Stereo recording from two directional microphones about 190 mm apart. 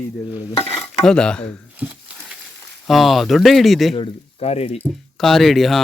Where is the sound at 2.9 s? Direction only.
Centre (ahead or behind).